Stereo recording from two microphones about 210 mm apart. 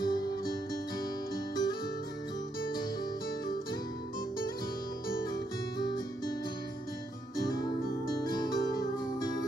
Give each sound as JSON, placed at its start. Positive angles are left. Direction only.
{"t": 0.0, "sound": "music", "side_deg": 20}
{"t": 1.5, "sound": "music", "side_deg": 20}
{"t": 5.3, "sound": "music", "side_deg": 20}
{"t": 8.2, "sound": "music", "side_deg": 20}